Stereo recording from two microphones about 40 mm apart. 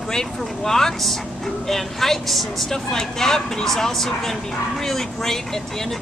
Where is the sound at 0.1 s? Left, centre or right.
Centre.